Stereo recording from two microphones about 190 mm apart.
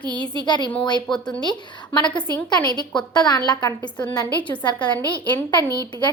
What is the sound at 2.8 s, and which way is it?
A woman's voice, 20° left (ahead or behind).